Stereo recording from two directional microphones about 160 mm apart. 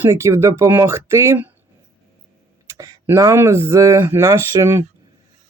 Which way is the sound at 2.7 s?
20° right (ahead or behind).